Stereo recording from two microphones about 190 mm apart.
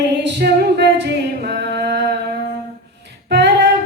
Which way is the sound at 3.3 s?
65° right (ahead or behind).